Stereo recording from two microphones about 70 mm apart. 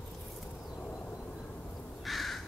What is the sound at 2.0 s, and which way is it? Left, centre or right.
Crow, centre.